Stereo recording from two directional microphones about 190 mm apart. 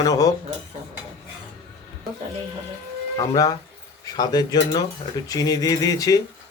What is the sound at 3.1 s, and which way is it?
Speech, 20° left (ahead or behind).